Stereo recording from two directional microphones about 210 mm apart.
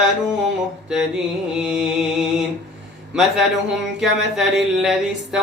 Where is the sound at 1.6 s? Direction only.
5° right (ahead or behind).